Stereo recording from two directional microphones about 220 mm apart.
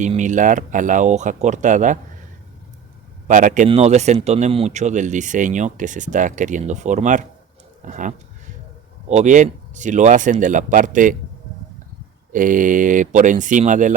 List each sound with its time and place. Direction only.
0.0 s speech: 35° right (ahead or behind)
3.2 s speech: 35° right (ahead or behind)
12.3 s speech: 35° right (ahead or behind)